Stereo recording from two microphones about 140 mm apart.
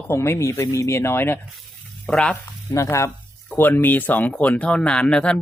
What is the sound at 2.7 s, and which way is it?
Speech, 20° left (ahead or behind).